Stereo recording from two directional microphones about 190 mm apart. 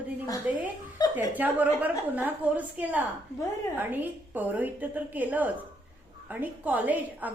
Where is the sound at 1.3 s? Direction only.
10° right (ahead or behind).